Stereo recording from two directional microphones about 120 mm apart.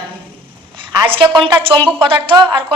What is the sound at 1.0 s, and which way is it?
A woman's voice, 45° right (ahead or behind).